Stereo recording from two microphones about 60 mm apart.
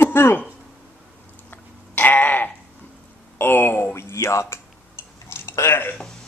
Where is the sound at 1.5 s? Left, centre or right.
Left.